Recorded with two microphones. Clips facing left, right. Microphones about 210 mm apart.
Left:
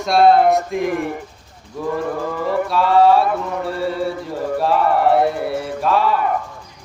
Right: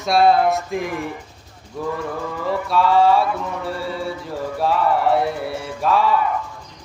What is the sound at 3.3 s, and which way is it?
Music, 60° left (ahead or behind).